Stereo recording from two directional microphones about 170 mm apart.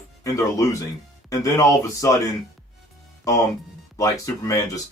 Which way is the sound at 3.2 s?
20° left (ahead or behind).